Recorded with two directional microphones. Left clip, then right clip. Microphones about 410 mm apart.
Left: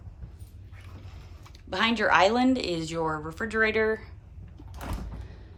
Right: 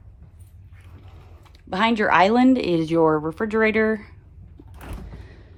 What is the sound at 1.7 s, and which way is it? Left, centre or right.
Speech, centre.